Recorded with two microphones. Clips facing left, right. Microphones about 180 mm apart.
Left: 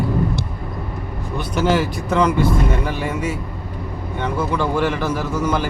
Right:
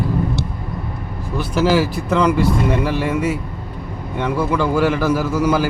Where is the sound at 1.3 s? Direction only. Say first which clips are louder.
Right 2 dB; centre (ahead or behind).